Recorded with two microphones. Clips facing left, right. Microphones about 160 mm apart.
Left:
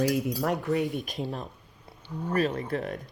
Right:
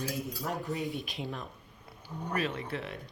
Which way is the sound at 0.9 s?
40° left (ahead or behind).